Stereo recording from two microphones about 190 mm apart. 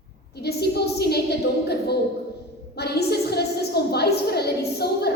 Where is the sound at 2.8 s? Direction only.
60° left (ahead or behind).